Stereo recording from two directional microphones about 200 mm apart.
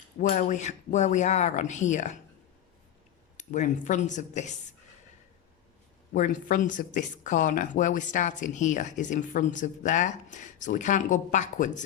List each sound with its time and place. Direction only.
0.2 s speech: 35° left (ahead or behind)
3.3 s speech: 35° left (ahead or behind)
6.1 s speech: 40° left (ahead or behind)